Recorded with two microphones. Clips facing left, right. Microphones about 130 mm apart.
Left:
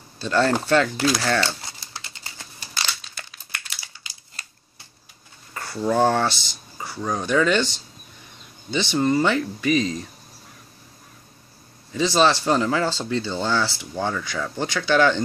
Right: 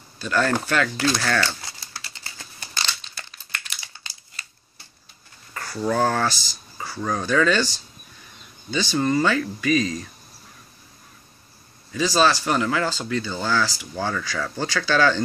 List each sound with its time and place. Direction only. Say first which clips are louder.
0.2 s speech: left 2 dB; 30° left (ahead or behind)
1.2 s typewriter: left 1 dB; 25° left (ahead or behind)
2.7 s crumpling: even; 5° left (ahead or behind)
4.4 s camera: even; 40° left (ahead or behind)
5.5 s a sound: even; 20° left (ahead or behind)
5.9 s speech: left 3 dB; 25° left (ahead or behind)
8.9 s speech: left 1 dB; 20° left (ahead or behind)
11.9 s speech: left 1 dB; 25° left (ahead or behind)